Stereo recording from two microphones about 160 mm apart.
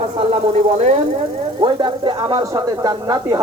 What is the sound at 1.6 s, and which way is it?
Speech, 30° right (ahead or behind).